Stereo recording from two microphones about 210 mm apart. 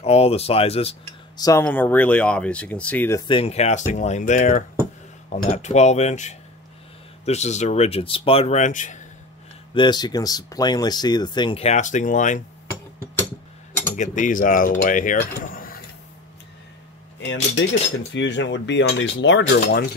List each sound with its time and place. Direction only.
0.0 s speech: 30° left (ahead or behind)
1.4 s speech: 15° left (ahead or behind); by 9.0 s 35° left (ahead or behind)
9.8 s speech: 20° left (ahead or behind); by 12.4 s 35° left (ahead or behind)
13.9 s speech: 35° left (ahead or behind)
17.2 s cutlery: 60° left (ahead or behind)